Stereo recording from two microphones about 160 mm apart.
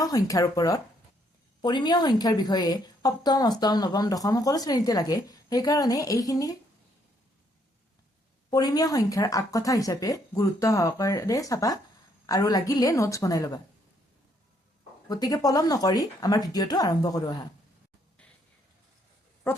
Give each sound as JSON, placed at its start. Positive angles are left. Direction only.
{"t": 0.0, "sound": "a woman's voice", "side_deg": 20}
{"t": 8.4, "sound": "a woman's voice", "side_deg": 25}
{"t": 15.1, "sound": "a woman's voice", "side_deg": 25}